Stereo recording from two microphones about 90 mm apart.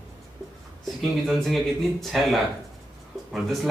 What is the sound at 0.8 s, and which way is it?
Speech, 5° left (ahead or behind).